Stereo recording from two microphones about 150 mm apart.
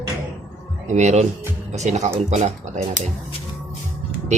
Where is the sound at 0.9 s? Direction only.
50° right (ahead or behind).